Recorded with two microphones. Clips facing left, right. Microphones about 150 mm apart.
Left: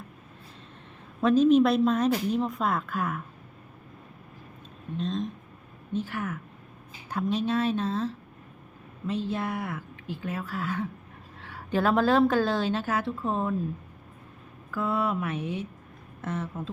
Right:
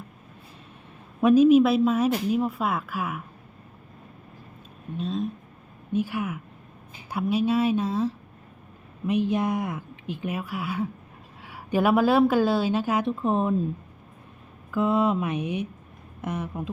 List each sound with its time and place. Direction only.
1.2 s speech: 10° right (ahead or behind)
4.9 s speech: 5° right (ahead or behind)
14.7 s speech: 20° right (ahead or behind)